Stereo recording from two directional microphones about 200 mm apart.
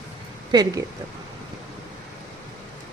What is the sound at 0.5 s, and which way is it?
Speech, 20° right (ahead or behind).